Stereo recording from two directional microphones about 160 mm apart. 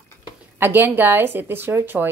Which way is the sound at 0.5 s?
15° right (ahead or behind).